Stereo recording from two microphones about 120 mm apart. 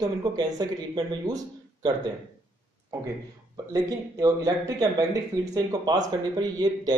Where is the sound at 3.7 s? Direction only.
30° right (ahead or behind).